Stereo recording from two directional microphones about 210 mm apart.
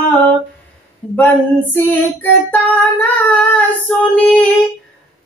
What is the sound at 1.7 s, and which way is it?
Child singing, 10° left (ahead or behind).